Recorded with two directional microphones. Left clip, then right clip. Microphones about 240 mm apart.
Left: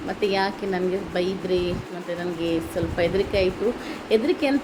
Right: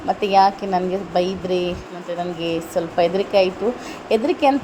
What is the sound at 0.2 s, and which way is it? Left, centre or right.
Speech, centre.